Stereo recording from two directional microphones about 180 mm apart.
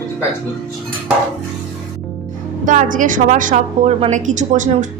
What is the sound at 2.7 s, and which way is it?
A woman's voice, 45° right (ahead or behind).